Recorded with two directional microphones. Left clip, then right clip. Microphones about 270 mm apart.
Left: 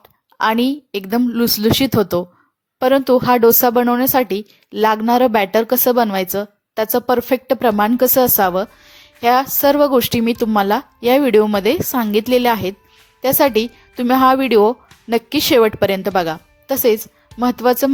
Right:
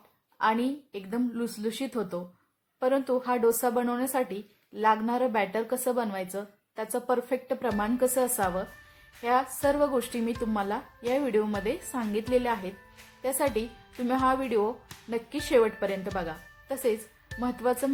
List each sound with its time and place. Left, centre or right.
0.3 s speech: left